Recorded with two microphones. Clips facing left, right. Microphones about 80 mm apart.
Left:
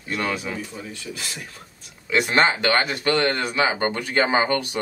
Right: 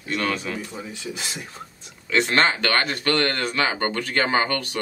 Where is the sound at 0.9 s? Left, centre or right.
Centre.